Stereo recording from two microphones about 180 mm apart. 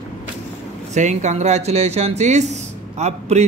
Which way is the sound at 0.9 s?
40° right (ahead or behind).